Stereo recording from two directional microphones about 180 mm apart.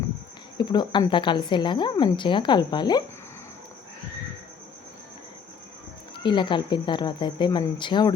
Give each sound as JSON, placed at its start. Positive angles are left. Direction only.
{"t": 0.5, "sound": "a woman's voice", "side_deg": 25}
{"t": 6.2, "sound": "a woman's voice", "side_deg": 25}